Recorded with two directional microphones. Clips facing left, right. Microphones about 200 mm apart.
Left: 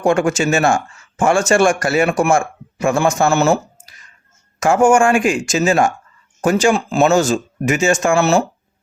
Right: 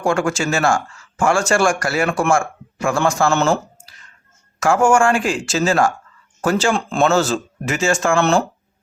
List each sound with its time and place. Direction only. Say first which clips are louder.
0.0 s speech: left 4 dB; 20° left (ahead or behind)
3.2 s speech: left 2 dB; 10° left (ahead or behind)
6.7 s speech: left 3 dB; 5° left (ahead or behind)
7.0 s speech: left 2 dB; 15° left (ahead or behind)
8.2 s speech: left 2 dB; 5° left (ahead or behind)